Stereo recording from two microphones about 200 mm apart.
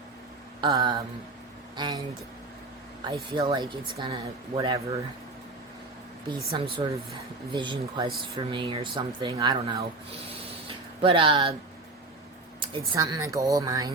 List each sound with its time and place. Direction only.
0.6 s speech: 20° right (ahead or behind)
3.1 s speech: 25° right (ahead or behind)
6.2 s speech: 25° right (ahead or behind)
12.9 s speech: 20° right (ahead or behind)